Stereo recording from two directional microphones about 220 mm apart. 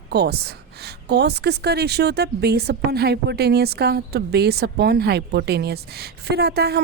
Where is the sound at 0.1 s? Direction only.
45° right (ahead or behind).